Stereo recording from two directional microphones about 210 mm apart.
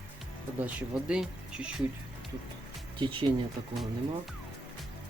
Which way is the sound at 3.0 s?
25° right (ahead or behind).